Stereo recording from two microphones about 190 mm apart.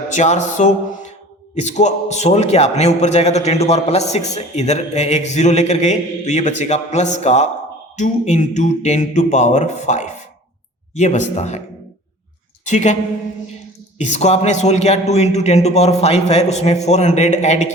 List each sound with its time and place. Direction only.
0.1 s a man's voice: 40° left (ahead or behind)
12.6 s a man's voice: 40° left (ahead or behind)
14.0 s a man's voice: 35° left (ahead or behind)